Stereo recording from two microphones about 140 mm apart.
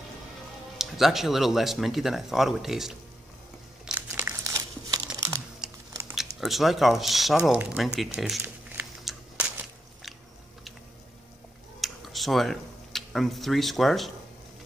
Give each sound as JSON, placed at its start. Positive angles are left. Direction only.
{"t": 0.7, "sound": "speech", "side_deg": 0}
{"t": 3.8, "sound": "crumpling", "side_deg": -10}
{"t": 4.4, "sound": "crumpling", "side_deg": -25}
{"t": 5.6, "sound": "biting", "side_deg": -5}
{"t": 6.1, "sound": "speech", "side_deg": 0}
{"t": 11.8, "sound": "a sound", "side_deg": 0}